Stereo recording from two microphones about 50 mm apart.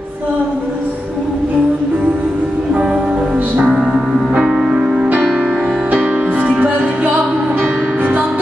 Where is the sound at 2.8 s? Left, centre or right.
Right.